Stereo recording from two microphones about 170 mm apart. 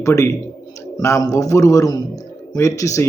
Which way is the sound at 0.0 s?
15° left (ahead or behind).